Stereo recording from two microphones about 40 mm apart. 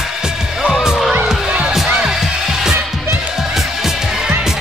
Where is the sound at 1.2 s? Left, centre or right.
Right.